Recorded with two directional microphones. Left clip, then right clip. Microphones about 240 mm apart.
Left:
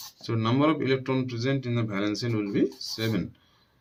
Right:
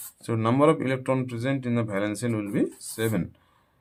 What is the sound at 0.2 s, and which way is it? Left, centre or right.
Speech, right.